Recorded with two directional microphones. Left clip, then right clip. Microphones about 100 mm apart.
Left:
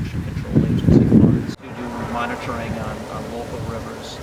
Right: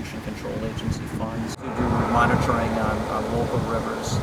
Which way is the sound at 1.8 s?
25° right (ahead or behind).